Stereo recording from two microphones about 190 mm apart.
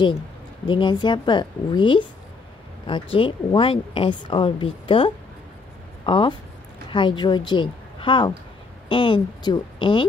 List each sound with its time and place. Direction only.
0.7 s a woman's voice: 25° left (ahead or behind)